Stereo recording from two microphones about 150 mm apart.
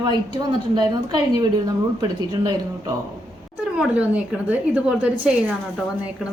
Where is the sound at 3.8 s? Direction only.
10° right (ahead or behind).